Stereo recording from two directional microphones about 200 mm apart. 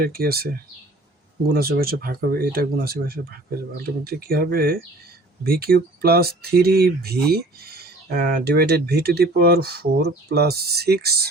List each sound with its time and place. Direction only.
0.0 s speech: 50° right (ahead or behind)
1.5 s speech: 50° right (ahead or behind)